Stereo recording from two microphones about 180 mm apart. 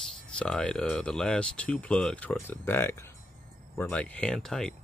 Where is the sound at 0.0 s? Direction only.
5° left (ahead or behind).